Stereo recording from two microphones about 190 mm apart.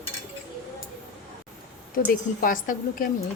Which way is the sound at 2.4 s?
45° left (ahead or behind).